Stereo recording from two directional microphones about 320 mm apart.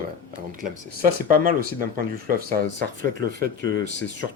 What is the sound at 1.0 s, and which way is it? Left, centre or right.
Speech, right.